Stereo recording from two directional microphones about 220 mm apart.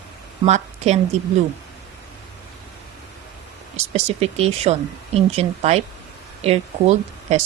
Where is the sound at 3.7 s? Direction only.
30° right (ahead or behind).